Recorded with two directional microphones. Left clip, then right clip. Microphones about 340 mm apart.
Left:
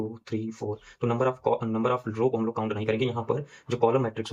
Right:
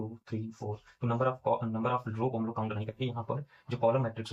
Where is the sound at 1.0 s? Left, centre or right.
Centre.